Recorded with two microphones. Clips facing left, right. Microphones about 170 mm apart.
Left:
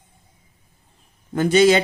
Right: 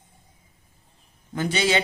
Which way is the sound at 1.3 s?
45° left (ahead or behind).